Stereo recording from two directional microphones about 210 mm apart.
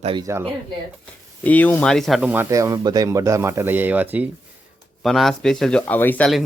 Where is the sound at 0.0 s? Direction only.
20° right (ahead or behind).